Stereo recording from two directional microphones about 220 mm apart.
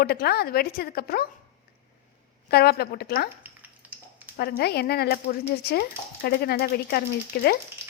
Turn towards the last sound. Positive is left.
turn(degrees=45)  # may be behind; listen again after turning